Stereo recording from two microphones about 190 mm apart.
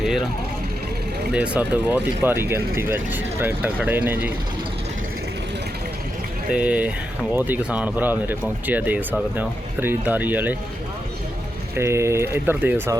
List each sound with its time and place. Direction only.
0.0 s speech: centre (ahead or behind)
1.3 s speech: 5° right (ahead or behind)
6.5 s speech: 5° right (ahead or behind)
11.8 s speech: 15° right (ahead or behind)